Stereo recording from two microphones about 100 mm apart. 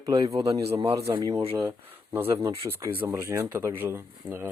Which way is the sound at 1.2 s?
40° right (ahead or behind).